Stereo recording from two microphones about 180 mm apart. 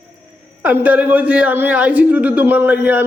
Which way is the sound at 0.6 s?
10° right (ahead or behind).